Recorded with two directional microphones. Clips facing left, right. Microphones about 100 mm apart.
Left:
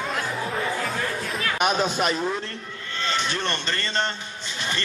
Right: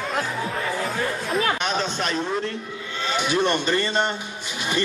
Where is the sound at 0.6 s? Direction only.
Centre (ahead or behind).